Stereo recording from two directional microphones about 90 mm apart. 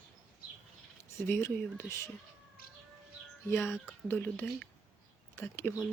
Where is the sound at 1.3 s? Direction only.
25° left (ahead or behind).